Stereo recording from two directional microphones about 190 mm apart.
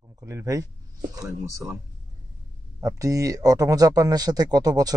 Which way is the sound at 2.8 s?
15° right (ahead or behind).